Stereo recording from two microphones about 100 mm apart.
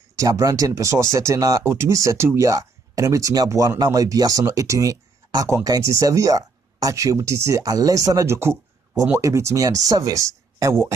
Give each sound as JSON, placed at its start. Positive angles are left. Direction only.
{"t": 0.2, "sound": "speech", "side_deg": -35}